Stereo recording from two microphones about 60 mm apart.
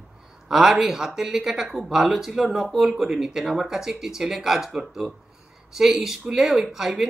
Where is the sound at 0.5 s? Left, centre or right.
Centre.